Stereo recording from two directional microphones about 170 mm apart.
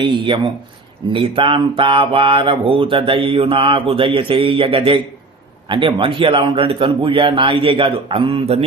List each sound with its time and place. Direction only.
0.0 s speech: 30° right (ahead or behind)